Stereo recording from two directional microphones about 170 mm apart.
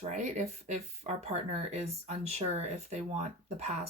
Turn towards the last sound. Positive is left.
turn(degrees=-40)  # may be behind; listen again after turning